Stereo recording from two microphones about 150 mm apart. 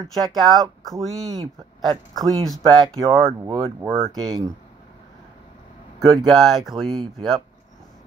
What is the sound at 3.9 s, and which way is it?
Speech, 45° right (ahead or behind).